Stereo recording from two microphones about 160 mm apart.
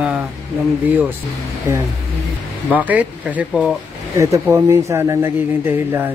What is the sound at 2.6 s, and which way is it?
Speech, 10° right (ahead or behind).